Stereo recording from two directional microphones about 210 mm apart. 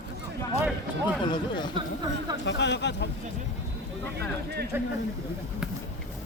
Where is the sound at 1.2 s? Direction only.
20° left (ahead or behind).